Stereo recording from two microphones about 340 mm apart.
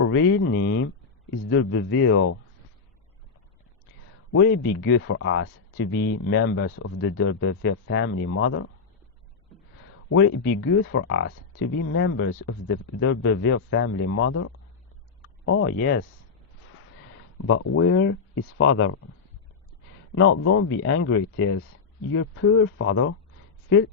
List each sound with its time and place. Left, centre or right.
0.0 s speech: left
4.3 s speech: left
10.1 s speech: left
17.3 s speech: left
20.1 s speech: left